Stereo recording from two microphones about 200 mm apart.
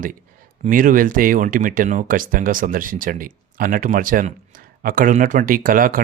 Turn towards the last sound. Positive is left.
turn(degrees=-45)  # may be behind; listen again after turning